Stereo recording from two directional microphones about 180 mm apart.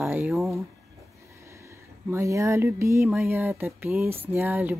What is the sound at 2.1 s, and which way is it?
Speech, 15° right (ahead or behind).